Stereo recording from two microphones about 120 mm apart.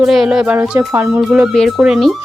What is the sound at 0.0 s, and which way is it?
A woman's voice, 5° right (ahead or behind).